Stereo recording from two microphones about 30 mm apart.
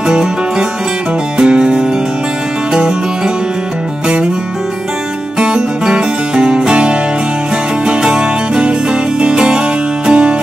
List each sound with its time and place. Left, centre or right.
0.1 s music: right
5.9 s music: right
8.2 s music: right